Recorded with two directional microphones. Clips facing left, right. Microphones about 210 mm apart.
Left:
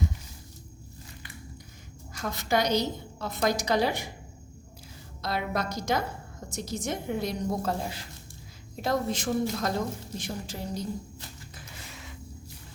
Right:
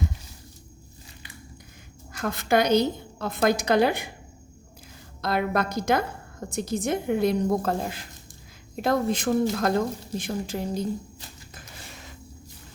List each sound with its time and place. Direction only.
2.1 s a woman's voice: 55° right (ahead or behind)
5.2 s a woman's voice: 55° right (ahead or behind)
11.5 s a sound: 40° right (ahead or behind)